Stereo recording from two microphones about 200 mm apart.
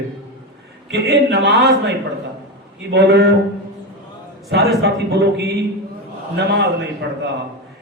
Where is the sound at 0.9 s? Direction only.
55° right (ahead or behind).